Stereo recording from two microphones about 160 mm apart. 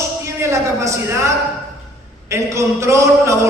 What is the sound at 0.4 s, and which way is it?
Speech, 15° right (ahead or behind).